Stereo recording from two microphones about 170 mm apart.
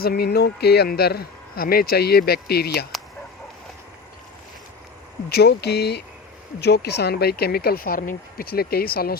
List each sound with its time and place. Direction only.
0.0 s speech: 65° left (ahead or behind)
5.3 s speech: 75° left (ahead or behind)